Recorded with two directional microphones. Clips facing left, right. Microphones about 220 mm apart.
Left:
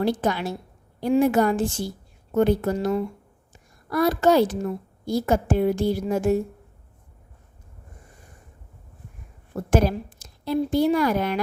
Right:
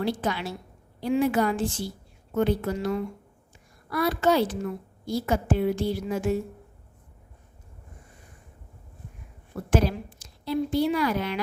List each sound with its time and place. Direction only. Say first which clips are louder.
0.0 s a woman's voice: left 4 dB; 45° left (ahead or behind)
9.6 s a woman's voice: left 3 dB; 45° left (ahead or behind)